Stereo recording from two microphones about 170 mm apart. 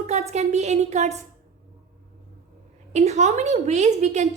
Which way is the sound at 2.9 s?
40° right (ahead or behind).